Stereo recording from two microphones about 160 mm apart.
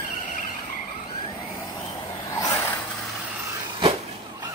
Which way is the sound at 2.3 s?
20° left (ahead or behind).